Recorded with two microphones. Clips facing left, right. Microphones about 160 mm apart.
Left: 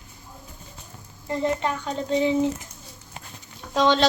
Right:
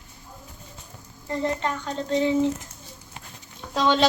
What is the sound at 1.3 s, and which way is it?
A child's voice, 15° left (ahead or behind).